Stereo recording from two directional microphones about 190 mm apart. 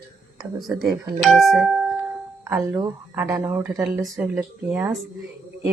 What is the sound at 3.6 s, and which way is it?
A woman's voice, centre (ahead or behind).